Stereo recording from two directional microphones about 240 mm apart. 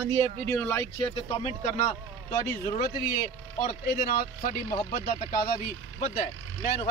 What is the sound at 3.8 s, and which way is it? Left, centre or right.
Speech, left.